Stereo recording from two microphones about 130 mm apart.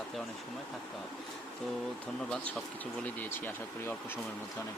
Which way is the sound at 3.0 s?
15° left (ahead or behind).